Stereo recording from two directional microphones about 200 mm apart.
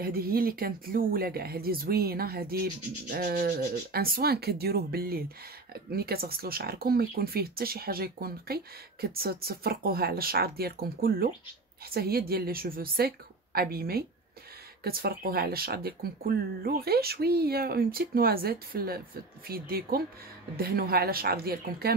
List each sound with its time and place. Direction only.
0.0 s speech: 50° right (ahead or behind)